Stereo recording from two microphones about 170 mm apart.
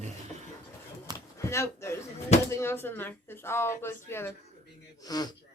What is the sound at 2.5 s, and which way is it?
Speech, 15° left (ahead or behind).